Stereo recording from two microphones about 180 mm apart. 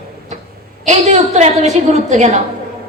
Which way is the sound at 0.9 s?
40° right (ahead or behind).